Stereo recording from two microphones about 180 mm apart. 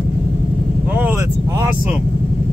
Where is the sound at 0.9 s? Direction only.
10° right (ahead or behind).